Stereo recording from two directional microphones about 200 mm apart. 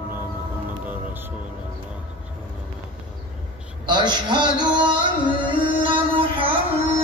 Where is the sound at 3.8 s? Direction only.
20° right (ahead or behind).